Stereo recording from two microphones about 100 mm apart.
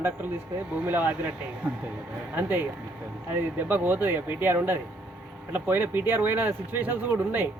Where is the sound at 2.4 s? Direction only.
20° right (ahead or behind).